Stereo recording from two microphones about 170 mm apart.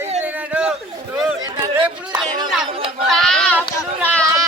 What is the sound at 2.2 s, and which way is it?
Chatter, 25° right (ahead or behind).